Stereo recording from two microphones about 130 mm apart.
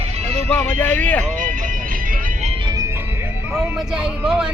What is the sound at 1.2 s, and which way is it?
Music, 90° right.